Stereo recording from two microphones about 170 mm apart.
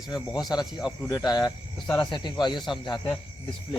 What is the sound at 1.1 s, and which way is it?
Speech, 25° left (ahead or behind).